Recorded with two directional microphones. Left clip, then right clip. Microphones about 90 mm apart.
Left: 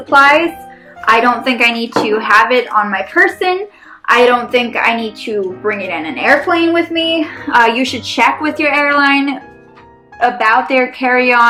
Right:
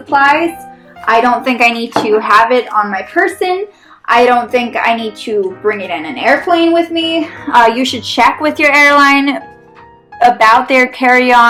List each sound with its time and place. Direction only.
0.1 s speech: centre (ahead or behind)
1.0 s a woman's voice: 10° right (ahead or behind)
1.4 s speech: 35° right (ahead or behind)
2.3 s a woman's voice: 25° right (ahead or behind)
2.6 s a woman's voice: 10° right (ahead or behind)
4.0 s a woman's voice: 20° right (ahead or behind)
6.7 s a woman's voice: 10° right (ahead or behind)
7.4 s a woman's voice: 40° right (ahead or behind)
8.4 s speech: 70° right (ahead or behind)